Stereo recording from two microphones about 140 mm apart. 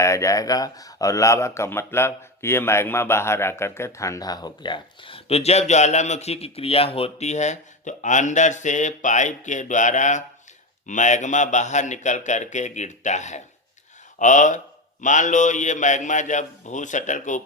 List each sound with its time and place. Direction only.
0.0 s a man's voice: 20° left (ahead or behind); by 17.4 s 60° left (ahead or behind)